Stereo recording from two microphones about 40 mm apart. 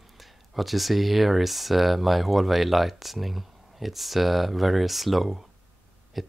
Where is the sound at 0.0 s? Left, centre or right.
Centre.